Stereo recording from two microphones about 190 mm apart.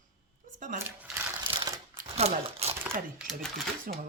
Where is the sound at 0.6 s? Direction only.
45° right (ahead or behind).